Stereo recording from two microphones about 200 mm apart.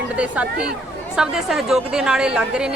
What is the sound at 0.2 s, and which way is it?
A woman's voice, 5° right (ahead or behind).